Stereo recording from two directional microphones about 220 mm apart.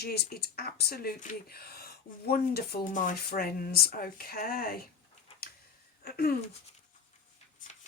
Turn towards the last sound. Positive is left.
turn(degrees=45)  # may be behind; listen again after turning